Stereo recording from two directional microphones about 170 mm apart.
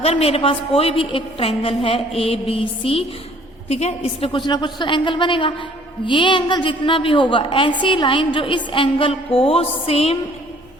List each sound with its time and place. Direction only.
0.0 s a woman's voice: 35° left (ahead or behind)